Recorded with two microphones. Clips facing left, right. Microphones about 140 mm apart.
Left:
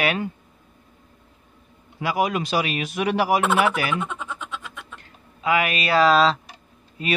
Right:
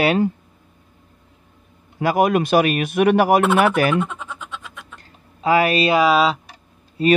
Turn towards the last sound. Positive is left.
turn(degrees=-35)  # may be behind; listen again after turning